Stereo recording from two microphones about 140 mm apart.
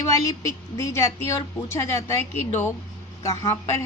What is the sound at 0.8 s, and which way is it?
A woman's voice, 25° left (ahead or behind).